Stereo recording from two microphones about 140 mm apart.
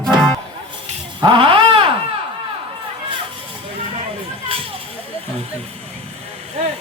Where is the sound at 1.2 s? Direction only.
35° right (ahead or behind).